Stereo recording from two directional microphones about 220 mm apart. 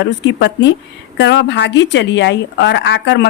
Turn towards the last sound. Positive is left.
turn(degrees=55)  # may be behind; listen again after turning